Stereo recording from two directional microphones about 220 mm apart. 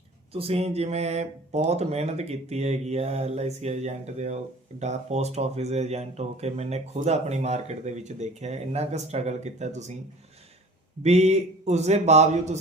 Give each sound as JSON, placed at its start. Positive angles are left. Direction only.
{"t": 0.3, "sound": "speech", "side_deg": -25}
{"t": 11.0, "sound": "speech", "side_deg": -30}